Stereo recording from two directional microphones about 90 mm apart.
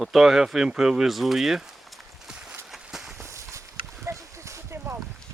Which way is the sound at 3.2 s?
35° right (ahead or behind).